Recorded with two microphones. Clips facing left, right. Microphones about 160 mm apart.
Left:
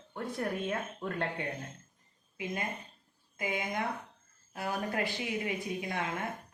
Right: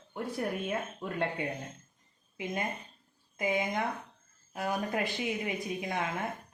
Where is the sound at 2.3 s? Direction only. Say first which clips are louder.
Right 2 dB; 25° right (ahead or behind).